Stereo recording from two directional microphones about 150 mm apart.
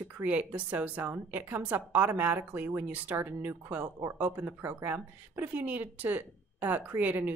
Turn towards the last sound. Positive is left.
turn(degrees=-10)  # may be behind; listen again after turning